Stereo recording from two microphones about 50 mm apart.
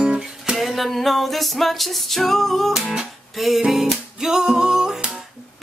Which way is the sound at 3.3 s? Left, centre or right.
Centre.